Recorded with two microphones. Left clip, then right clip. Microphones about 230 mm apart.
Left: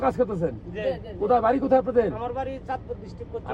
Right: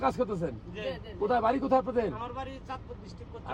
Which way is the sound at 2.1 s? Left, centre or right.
Centre.